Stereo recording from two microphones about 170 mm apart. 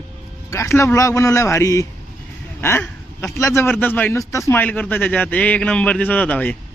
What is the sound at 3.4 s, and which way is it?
A man's voice, 15° left (ahead or behind).